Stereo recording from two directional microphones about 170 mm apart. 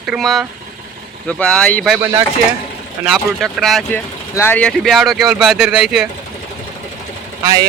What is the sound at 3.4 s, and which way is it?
Speech, centre (ahead or behind).